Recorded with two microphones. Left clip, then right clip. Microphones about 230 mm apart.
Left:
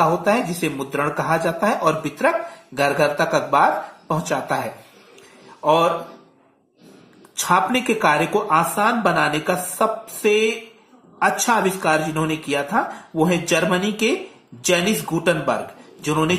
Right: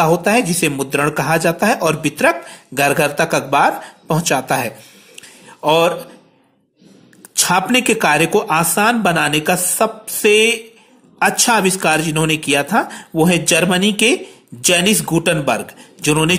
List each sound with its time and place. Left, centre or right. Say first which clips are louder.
0.0 s speech: right 4 dB; right
7.3 s speech: right 3 dB; right